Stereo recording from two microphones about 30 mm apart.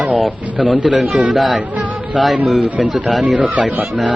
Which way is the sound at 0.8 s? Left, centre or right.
Right.